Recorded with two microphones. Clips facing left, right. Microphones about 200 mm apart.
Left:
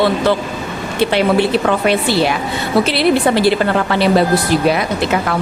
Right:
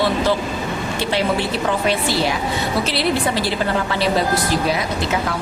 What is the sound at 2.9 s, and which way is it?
A woman's voice, 60° left (ahead or behind).